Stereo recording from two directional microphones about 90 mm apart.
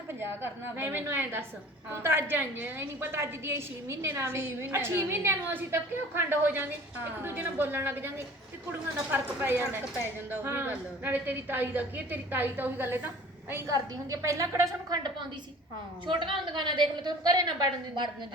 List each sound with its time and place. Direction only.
0.2 s a woman's voice: 25° right (ahead or behind)
13.7 s a woman's voice: 40° right (ahead or behind); by 18.1 s 55° right (ahead or behind)